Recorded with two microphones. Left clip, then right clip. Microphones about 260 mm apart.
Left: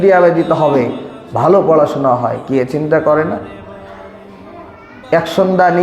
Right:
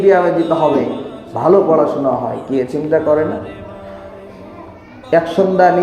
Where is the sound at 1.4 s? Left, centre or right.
Left.